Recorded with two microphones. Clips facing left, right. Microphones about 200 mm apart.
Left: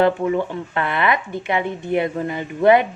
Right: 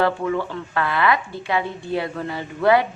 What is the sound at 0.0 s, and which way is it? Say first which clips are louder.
A woman's voice: left 3 dB; 20° left (ahead or behind).